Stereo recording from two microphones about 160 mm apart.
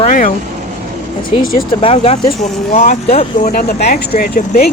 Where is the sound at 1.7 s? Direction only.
35° left (ahead or behind).